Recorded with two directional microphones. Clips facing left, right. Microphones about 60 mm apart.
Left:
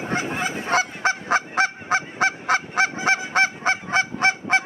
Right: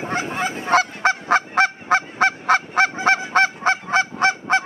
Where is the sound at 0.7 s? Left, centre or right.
Right.